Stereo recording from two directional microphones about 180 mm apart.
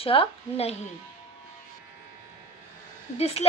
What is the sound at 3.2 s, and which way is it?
Speech, 35° left (ahead or behind).